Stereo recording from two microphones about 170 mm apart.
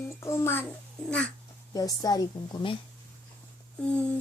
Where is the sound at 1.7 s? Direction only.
20° left (ahead or behind).